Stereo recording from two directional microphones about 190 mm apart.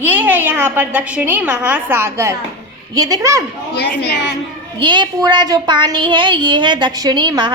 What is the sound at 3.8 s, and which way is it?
Speech, 60° left (ahead or behind).